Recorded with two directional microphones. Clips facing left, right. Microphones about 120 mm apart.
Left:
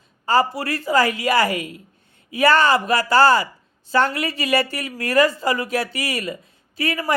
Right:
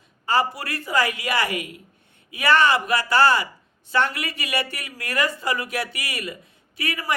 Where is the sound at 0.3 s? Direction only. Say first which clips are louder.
Left 4 dB; 30° left (ahead or behind).